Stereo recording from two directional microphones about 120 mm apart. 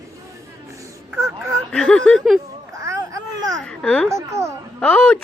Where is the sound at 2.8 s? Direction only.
25° right (ahead or behind).